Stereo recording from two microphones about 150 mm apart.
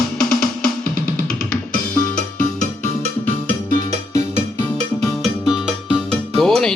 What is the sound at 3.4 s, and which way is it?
Music, 55° right (ahead or behind).